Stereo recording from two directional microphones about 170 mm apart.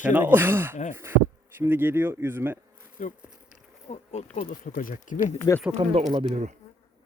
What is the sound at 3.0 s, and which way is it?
Speech, 50° left (ahead or behind).